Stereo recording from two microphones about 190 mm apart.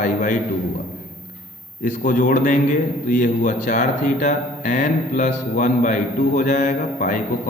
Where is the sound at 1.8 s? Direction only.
40° left (ahead or behind).